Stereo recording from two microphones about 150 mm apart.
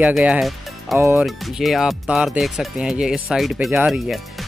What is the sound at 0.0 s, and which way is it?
Speech, 10° right (ahead or behind).